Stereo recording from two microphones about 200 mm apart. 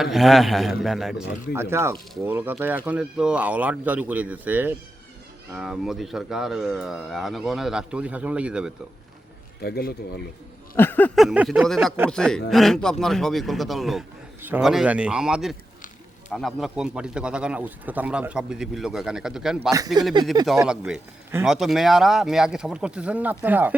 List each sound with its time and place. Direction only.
0.0 s speech: centre (ahead or behind)
1.5 s speech: 15° right (ahead or behind)
9.6 s a man's voice: 50° left (ahead or behind)
10.8 s speech: 10° left (ahead or behind)
19.7 s speech: 20° right (ahead or behind)
20.7 s speech: 5° right (ahead or behind)